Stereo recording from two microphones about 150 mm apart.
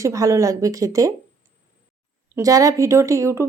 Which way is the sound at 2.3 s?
20° right (ahead or behind).